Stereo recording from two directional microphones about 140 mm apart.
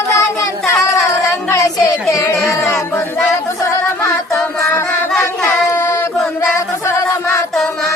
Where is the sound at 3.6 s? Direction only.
20° left (ahead or behind).